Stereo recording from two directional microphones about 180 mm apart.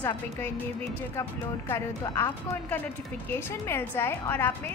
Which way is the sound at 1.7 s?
15° left (ahead or behind).